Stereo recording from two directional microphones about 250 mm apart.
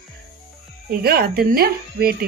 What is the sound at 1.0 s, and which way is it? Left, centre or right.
Speech, right.